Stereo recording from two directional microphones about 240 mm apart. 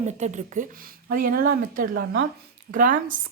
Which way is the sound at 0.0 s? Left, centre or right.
Right.